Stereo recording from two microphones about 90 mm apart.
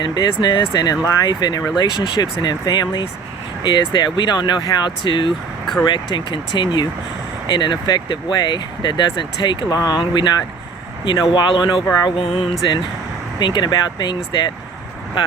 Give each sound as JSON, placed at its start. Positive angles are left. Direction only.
{"t": 0.0, "sound": "speech", "side_deg": 50}
{"t": 12.1, "sound": "music", "side_deg": 90}
{"t": 13.4, "sound": "speech", "side_deg": 55}